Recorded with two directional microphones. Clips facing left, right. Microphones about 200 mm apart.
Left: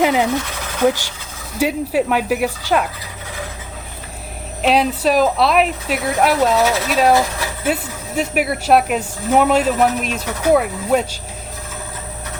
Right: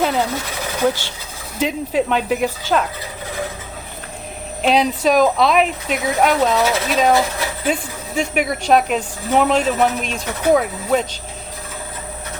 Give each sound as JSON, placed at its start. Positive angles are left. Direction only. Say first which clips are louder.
{"t": 0.0, "sound": "speech", "louder": "left 3 dB", "side_deg": 15}
{"t": 1.5, "sound": "speech", "louder": "left 2 dB", "side_deg": 10}
{"t": 4.6, "sound": "speech", "louder": "even", "side_deg": 5}